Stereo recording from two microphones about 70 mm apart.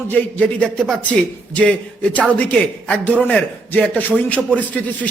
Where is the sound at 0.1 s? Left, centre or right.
Left.